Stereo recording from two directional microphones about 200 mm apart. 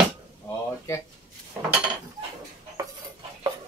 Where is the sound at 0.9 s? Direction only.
15° left (ahead or behind).